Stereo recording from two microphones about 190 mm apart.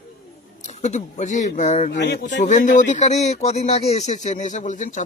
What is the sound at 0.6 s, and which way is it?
Speech, 40° left (ahead or behind).